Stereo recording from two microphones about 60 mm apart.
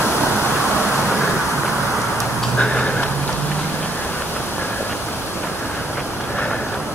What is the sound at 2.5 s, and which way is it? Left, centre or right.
Tick-tock, centre.